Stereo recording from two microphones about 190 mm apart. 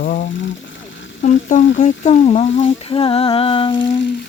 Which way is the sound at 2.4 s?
80° left.